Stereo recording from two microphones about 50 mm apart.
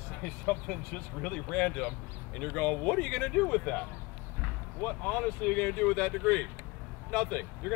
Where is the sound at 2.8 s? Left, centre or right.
Left.